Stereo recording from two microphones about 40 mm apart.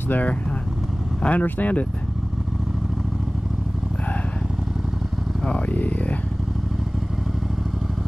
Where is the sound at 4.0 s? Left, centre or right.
Left.